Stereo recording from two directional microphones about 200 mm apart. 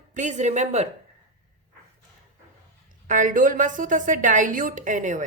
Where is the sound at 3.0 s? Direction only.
40° right (ahead or behind).